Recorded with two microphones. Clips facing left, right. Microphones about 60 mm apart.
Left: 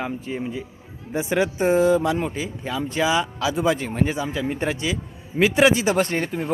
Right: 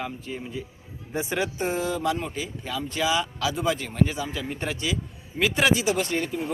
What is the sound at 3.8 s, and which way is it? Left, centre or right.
Speech, left.